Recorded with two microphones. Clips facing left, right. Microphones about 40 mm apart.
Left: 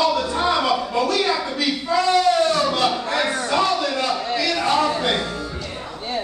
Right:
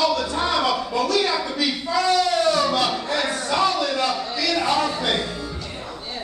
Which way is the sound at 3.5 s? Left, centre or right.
Centre.